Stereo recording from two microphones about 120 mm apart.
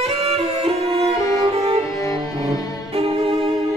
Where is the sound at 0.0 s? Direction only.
55° right (ahead or behind).